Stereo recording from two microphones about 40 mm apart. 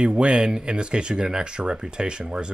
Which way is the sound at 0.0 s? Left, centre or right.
Right.